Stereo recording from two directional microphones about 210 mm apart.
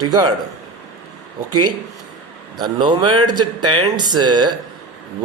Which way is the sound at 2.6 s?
20° right (ahead or behind).